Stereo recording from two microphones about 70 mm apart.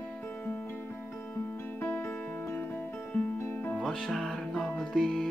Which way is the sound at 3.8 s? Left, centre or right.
Centre.